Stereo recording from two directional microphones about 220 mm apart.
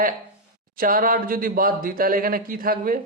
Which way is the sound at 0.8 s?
40° right (ahead or behind).